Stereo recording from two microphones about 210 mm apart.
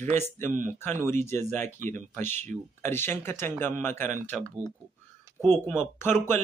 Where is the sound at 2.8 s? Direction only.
10° left (ahead or behind).